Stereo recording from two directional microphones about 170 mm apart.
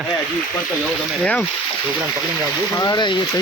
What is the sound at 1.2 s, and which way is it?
Speech, 5° left (ahead or behind).